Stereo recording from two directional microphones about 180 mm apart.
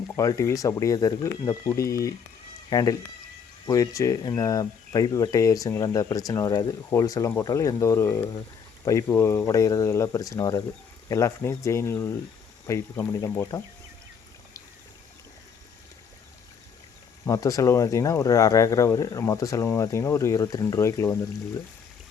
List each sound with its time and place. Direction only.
0.2 s speech: 15° left (ahead or behind)
17.2 s speech: 20° left (ahead or behind)